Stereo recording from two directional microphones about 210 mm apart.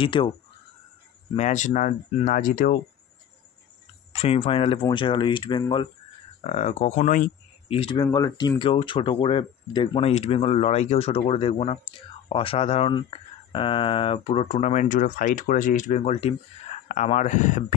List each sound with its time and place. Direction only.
0.0 s speech: 25° left (ahead or behind)
1.3 s speech: 35° left (ahead or behind)
4.1 s speech: 30° left (ahead or behind)
6.4 s speech: 35° left (ahead or behind)
7.7 s speech: 25° left (ahead or behind)